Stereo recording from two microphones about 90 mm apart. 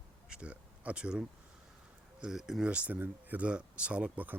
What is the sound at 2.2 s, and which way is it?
Speech, 5° right (ahead or behind).